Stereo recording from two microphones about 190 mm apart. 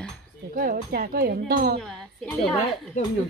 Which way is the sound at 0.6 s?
50° right (ahead or behind).